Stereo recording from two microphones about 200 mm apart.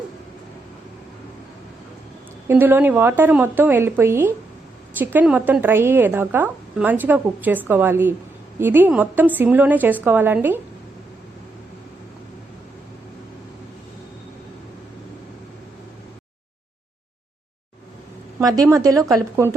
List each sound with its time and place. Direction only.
2.5 s a woman's voice: 10° right (ahead or behind)
18.3 s a woman's voice: 20° right (ahead or behind)